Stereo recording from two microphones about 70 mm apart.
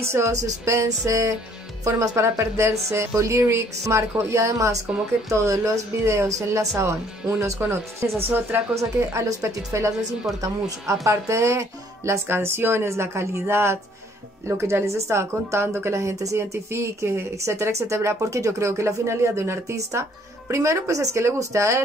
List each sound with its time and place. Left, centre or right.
0.0 s a woman's voice: right
9.7 s a woman's voice: right